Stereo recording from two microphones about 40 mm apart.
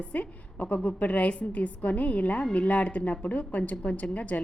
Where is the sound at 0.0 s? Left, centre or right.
Left.